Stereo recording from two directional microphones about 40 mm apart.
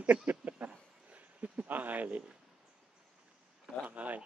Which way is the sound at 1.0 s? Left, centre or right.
Right.